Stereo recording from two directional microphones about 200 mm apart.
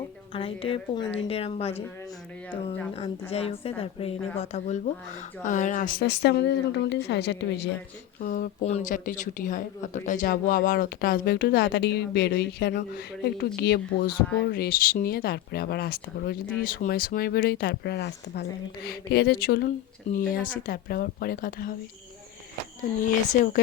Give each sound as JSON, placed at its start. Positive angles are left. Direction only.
{"t": 0.3, "sound": "a woman's voice", "side_deg": 25}
{"t": 2.9, "sound": "a woman's voice", "side_deg": 30}
{"t": 8.2, "sound": "speech", "side_deg": 45}
{"t": 23.0, "sound": "speech", "side_deg": 40}